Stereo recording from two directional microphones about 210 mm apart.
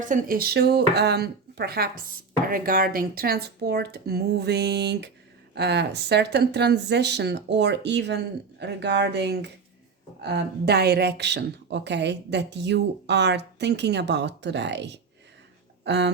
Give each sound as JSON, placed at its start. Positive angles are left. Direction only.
{"t": 0.0, "sound": "a woman's voice", "side_deg": -40}